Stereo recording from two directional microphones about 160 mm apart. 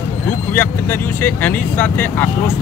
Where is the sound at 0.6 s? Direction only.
10° left (ahead or behind).